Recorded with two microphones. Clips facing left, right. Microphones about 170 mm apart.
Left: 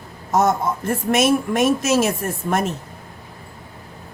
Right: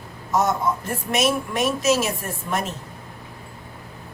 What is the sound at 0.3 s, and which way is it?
A man's voice, 45° left (ahead or behind).